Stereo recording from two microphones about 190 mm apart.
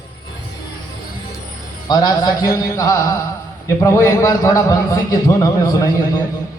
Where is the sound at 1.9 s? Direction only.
20° left (ahead or behind).